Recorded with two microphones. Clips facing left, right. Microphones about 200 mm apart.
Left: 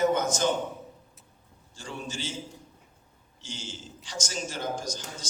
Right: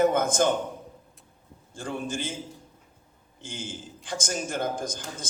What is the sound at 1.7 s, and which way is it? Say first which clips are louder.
Speech: right 6 dB; 55° right (ahead or behind).